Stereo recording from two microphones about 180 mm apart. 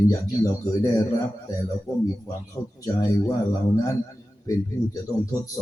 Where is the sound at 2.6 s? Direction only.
20° left (ahead or behind).